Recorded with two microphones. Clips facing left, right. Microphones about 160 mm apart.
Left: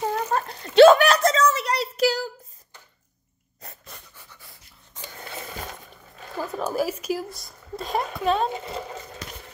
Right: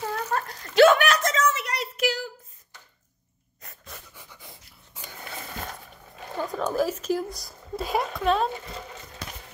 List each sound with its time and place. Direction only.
0.0 s a sound: 20° left (ahead or behind)
3.6 s dog: 35° left (ahead or behind)
4.1 s dog: 15° right (ahead or behind)
6.3 s speech: 5° left (ahead or behind)